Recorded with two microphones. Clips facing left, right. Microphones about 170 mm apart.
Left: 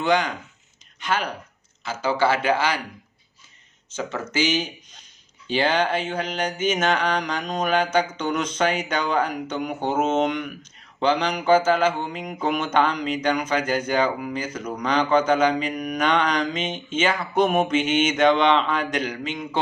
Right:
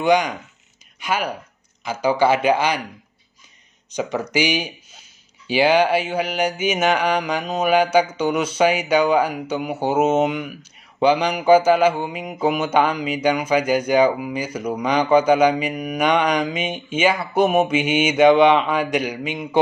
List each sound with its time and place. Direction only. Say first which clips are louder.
0.0 s mantra: right 4 dB; 15° right (ahead or behind)
0.9 s speech: right 2 dB; 10° right (ahead or behind)
1.9 s mantra: right 4 dB; 15° right (ahead or behind)
3.9 s mantra: right 5 dB; 15° right (ahead or behind)